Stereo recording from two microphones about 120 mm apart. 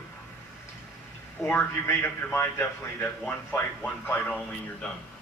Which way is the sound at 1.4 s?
20° left (ahead or behind).